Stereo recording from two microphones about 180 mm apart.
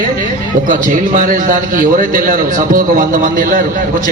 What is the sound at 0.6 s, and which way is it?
A man's voice, 50° right (ahead or behind).